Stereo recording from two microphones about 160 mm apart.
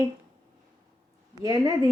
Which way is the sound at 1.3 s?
25° right (ahead or behind).